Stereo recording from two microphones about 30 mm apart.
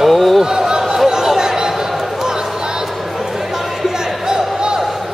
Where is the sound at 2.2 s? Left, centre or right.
Centre.